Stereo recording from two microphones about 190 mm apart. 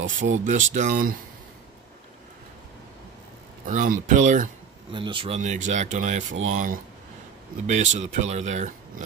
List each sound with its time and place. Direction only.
0.0 s speech: 85° right
0.7 s speech: 45° right (ahead or behind)
3.6 s speech: 45° right (ahead or behind)
4.9 s speech: 25° right (ahead or behind)